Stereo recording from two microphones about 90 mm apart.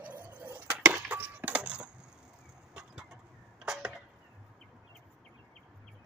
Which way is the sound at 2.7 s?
10° right (ahead or behind).